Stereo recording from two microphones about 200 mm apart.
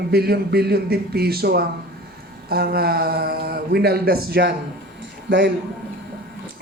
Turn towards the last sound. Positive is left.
turn(degrees=-60)  # may be behind; listen again after turning